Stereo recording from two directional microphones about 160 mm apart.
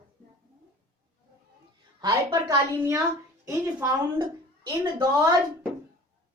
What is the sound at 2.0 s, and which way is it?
A woman's voice, 25° right (ahead or behind).